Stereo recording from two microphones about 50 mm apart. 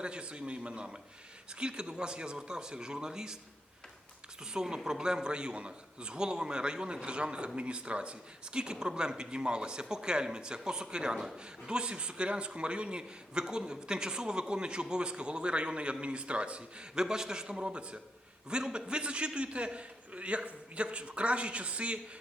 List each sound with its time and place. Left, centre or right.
0.0 s a man's voice: right
4.4 s a man's voice: centre